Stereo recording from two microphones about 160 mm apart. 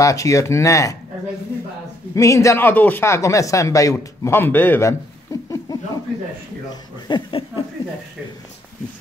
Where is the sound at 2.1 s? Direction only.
20° left (ahead or behind).